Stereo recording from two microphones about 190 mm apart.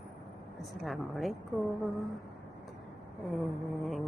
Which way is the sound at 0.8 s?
Centre (ahead or behind).